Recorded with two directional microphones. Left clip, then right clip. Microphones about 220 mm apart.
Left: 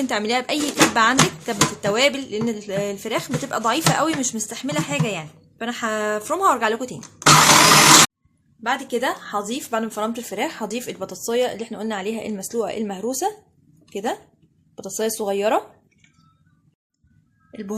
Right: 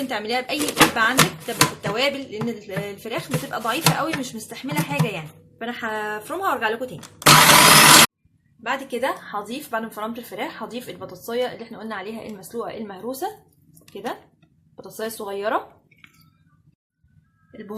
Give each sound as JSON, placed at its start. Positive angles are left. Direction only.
{"t": 0.1, "sound": "speech", "side_deg": 45}
{"t": 8.6, "sound": "speech", "side_deg": 40}
{"t": 17.5, "sound": "speech", "side_deg": 40}